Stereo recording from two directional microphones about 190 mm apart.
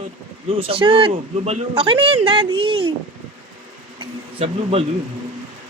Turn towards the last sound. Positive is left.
turn(degrees=-30)  # may be behind; listen again after turning